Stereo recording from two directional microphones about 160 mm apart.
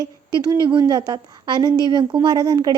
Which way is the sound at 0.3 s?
25° right (ahead or behind).